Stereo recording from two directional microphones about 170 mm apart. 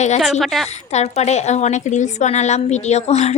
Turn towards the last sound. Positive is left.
turn(degrees=40)  # may be behind; listen again after turning